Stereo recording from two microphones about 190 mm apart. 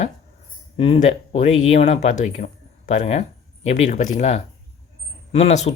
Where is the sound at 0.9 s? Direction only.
40° left (ahead or behind).